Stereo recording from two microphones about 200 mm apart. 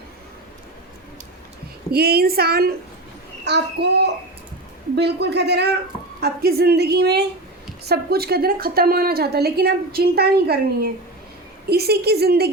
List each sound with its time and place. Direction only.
1.9 s a woman's voice: 50° right (ahead or behind)